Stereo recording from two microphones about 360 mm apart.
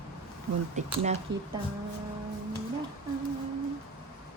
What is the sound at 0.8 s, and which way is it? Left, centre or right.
Speech, centre.